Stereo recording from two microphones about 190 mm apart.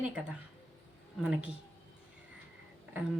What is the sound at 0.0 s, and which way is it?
Speech, 5° right (ahead or behind).